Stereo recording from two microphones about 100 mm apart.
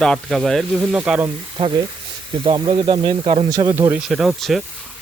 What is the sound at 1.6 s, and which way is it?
Speech, 65° right (ahead or behind).